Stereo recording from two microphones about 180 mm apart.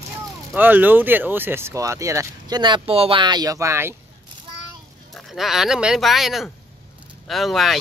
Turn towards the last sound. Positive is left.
turn(degrees=0)  # may be behind; listen again after turning